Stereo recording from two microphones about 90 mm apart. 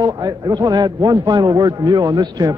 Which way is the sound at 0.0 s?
50° right (ahead or behind).